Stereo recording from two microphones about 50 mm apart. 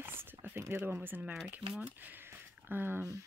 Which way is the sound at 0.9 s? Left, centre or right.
Right.